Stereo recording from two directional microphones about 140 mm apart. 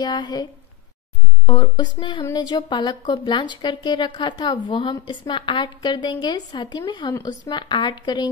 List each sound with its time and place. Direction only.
0.0 s speech: 30° left (ahead or behind)